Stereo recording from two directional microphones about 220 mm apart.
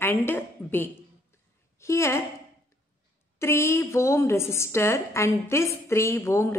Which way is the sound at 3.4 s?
10° left (ahead or behind).